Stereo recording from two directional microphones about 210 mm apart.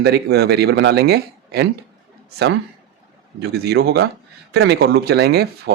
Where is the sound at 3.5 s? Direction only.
50° right (ahead or behind).